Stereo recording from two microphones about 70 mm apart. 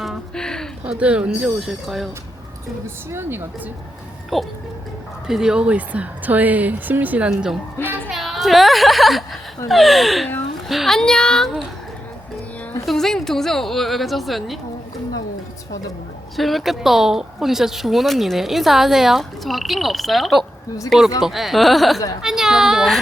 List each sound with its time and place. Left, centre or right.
0.3 s a sound: centre
0.9 s speech: centre
2.8 s a woman's voice: right
4.3 s a woman's voice: centre; by 7.3 s right
7.8 s music: left
8.1 s a woman's voice: centre
12.8 s a woman's voice: centre
16.4 s a woman's voice: centre